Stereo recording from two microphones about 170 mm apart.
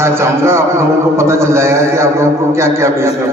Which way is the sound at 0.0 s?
15° right (ahead or behind).